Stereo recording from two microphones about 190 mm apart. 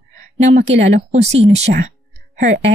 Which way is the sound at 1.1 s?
35° right (ahead or behind).